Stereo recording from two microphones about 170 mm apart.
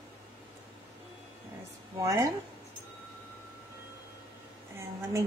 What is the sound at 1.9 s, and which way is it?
Speech, 20° right (ahead or behind).